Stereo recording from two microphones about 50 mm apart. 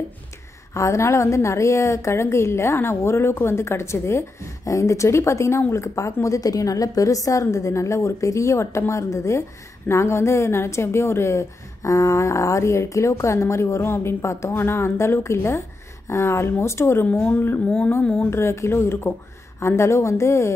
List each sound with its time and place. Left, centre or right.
0.7 s a woman's voice: left
9.8 s a woman's voice: left
14.5 s a woman's voice: left
17.2 s a woman's voice: left
18.3 s a woman's voice: left
19.8 s a woman's voice: left